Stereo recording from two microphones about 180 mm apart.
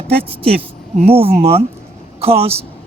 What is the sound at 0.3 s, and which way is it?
Speech, 35° right (ahead or behind).